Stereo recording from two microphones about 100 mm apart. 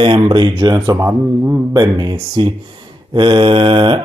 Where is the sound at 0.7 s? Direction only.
35° right (ahead or behind).